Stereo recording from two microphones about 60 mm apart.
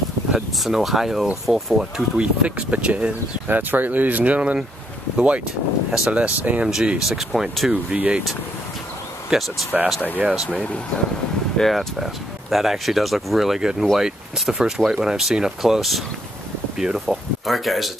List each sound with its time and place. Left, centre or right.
0.3 s speech: centre
2.1 s speech: right
6.7 s speech: centre
7.9 s speech: right
9.3 s speech: centre
11.5 s speech: centre